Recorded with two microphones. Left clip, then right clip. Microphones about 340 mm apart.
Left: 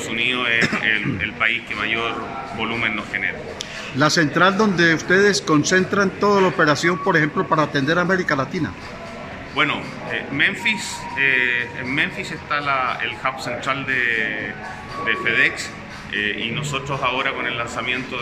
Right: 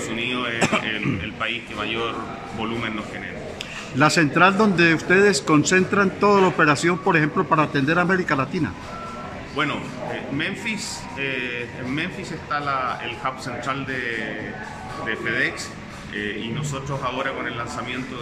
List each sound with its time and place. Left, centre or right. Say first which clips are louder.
0.2 s a man's voice: left 5 dB; centre
4.0 s a man's voice: even; centre